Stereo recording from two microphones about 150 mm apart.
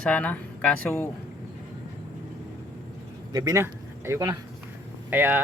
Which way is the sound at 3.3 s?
25° right (ahead or behind).